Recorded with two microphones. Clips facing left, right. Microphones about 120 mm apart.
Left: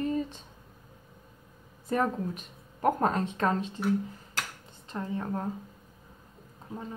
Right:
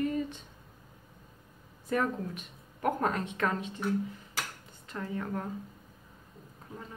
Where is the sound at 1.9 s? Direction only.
35° left (ahead or behind).